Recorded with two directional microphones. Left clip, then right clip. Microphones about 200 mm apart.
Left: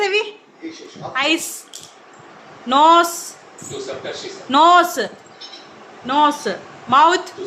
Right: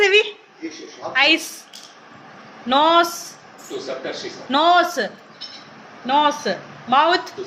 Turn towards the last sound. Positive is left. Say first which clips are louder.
# left 3 dB
turn(degrees=15)  # may be behind; listen again after turning